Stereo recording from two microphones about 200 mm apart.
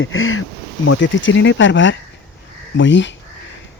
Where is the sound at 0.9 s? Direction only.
70° left (ahead or behind).